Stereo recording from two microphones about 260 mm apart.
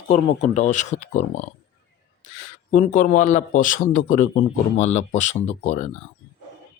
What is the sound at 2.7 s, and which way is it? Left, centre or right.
Speech, left.